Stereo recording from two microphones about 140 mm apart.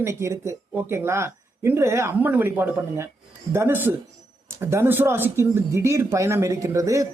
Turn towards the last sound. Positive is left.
turn(degrees=-20)  # may be behind; listen again after turning